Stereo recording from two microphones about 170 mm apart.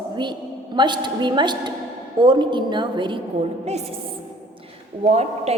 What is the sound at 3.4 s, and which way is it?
Speech, 40° right (ahead or behind).